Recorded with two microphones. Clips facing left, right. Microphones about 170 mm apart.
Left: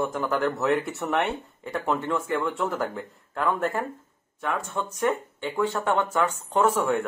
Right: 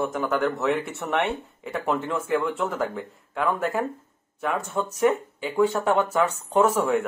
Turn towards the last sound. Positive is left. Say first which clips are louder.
# right 2 dB
turn(degrees=-10)  # may be behind; listen again after turning